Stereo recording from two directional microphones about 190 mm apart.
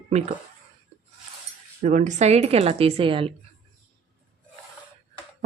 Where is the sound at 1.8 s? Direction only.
40° right (ahead or behind).